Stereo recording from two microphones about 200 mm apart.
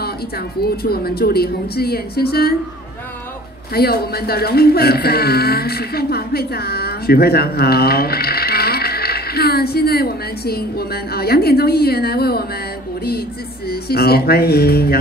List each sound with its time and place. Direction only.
0.6 s speech: 50° left (ahead or behind)
3.7 s speech: 50° left (ahead or behind)
13.7 s speech: 50° left (ahead or behind)